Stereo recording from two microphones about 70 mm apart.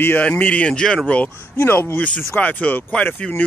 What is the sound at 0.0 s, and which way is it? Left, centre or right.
Speech, left.